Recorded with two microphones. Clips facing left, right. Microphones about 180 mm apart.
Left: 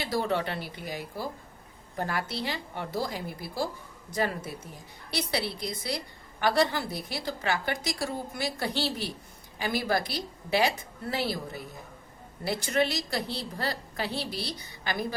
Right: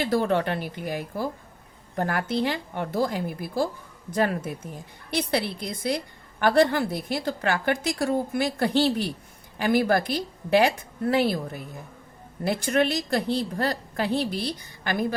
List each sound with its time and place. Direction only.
0.0 s a woman's voice: 55° right (ahead or behind)